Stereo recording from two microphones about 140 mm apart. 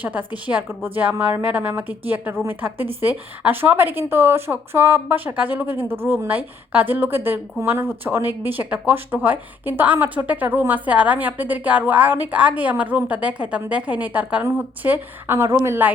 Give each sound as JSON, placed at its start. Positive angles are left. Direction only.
{"t": 0.0, "sound": "a woman's voice", "side_deg": -10}